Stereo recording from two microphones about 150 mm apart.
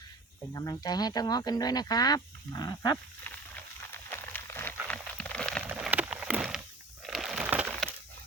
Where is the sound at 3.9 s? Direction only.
15° left (ahead or behind).